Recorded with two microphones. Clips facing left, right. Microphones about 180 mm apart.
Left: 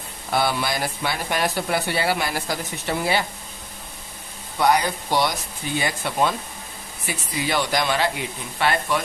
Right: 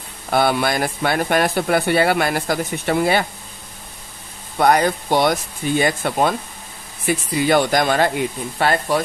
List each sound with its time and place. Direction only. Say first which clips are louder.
0.3 s speech: right 5 dB; 55° right (ahead or behind)
4.6 s speech: right 4 dB; 55° right (ahead or behind)